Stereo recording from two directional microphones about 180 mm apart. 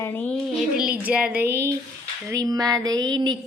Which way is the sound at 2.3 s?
20° right (ahead or behind).